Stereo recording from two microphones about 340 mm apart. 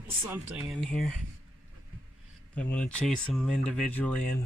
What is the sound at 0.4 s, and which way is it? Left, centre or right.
Speech, centre.